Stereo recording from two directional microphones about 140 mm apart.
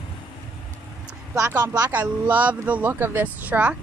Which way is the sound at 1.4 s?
20° right (ahead or behind).